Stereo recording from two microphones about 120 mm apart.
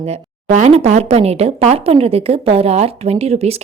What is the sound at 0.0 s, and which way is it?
A woman's voice, 60° right (ahead or behind).